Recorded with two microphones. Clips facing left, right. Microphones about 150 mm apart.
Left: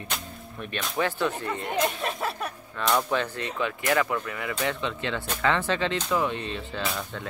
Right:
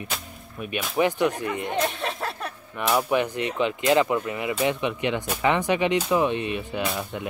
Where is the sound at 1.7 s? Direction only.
Centre (ahead or behind).